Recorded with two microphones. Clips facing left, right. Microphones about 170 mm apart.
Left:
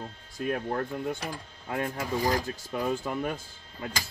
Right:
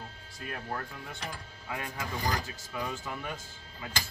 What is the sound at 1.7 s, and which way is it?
Speech, 50° left (ahead or behind).